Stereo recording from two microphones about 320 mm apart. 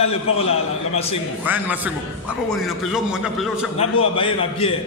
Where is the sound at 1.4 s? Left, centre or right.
Centre.